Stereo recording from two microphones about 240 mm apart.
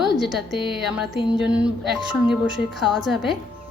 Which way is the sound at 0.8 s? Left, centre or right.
Centre.